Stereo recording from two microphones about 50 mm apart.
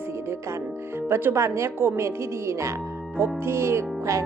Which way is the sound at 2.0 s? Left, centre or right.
Right.